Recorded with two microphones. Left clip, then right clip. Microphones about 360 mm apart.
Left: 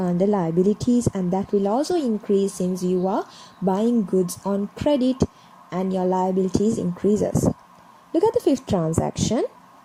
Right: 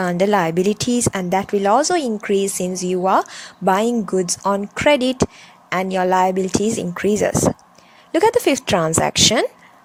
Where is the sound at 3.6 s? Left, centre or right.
Right.